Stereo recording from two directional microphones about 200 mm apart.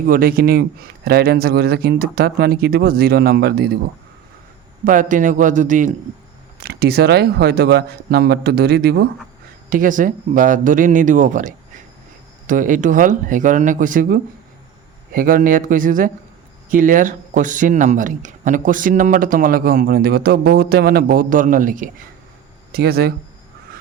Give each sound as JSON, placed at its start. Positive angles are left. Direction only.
{"t": 0.1, "sound": "speech", "side_deg": -45}
{"t": 4.9, "sound": "speech", "side_deg": -40}
{"t": 6.6, "sound": "speech", "side_deg": -50}
{"t": 9.6, "sound": "speech", "side_deg": -40}